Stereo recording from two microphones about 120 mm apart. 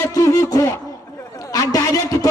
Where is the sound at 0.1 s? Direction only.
30° left (ahead or behind).